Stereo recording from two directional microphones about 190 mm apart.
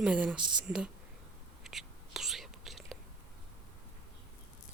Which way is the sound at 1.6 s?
Centre (ahead or behind).